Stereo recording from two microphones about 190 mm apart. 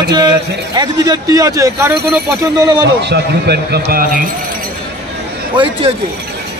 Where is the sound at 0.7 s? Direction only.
20° right (ahead or behind).